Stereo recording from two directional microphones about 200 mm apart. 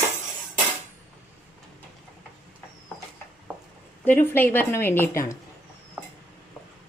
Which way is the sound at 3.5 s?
10° right (ahead or behind).